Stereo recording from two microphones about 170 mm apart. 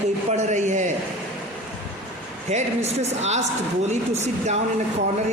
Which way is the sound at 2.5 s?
40° right (ahead or behind).